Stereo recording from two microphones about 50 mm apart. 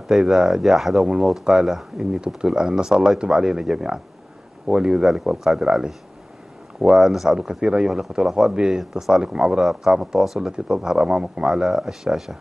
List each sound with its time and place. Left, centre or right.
0.2 s speech: centre
5.0 s speech: centre
7.0 s speech: centre
7.3 s speech: centre